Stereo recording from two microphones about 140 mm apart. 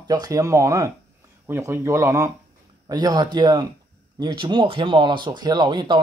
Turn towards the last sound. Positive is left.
turn(degrees=-30)  # may be behind; listen again after turning